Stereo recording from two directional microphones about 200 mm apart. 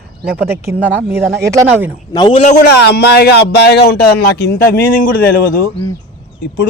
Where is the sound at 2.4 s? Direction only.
40° left (ahead or behind).